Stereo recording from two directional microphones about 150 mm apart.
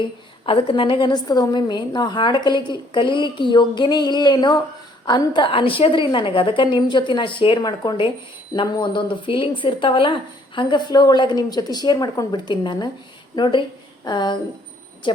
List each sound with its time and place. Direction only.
0.4 s a woman's voice: 35° left (ahead or behind)